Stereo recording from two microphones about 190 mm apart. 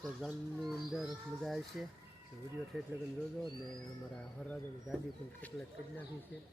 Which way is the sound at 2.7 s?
Centre (ahead or behind).